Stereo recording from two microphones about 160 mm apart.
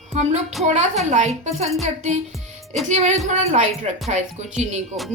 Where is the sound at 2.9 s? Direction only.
50° right (ahead or behind).